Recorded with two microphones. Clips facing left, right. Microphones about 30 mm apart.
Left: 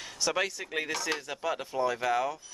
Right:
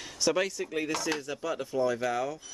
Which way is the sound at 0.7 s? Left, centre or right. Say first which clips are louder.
Right 1 dB; left.